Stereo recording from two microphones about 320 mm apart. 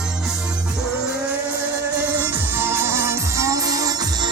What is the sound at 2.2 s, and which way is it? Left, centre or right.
Music, centre.